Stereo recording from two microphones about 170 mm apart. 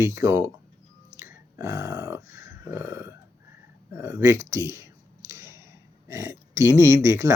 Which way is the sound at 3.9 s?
15° right (ahead or behind).